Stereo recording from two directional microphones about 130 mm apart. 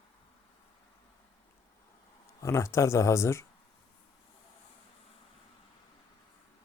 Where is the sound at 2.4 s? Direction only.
20° left (ahead or behind).